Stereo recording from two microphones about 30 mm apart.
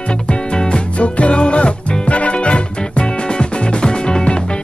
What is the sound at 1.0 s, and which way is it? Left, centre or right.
Music, left.